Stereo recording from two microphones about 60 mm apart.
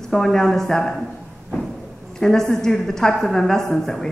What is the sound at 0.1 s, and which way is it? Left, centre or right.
Speech, centre.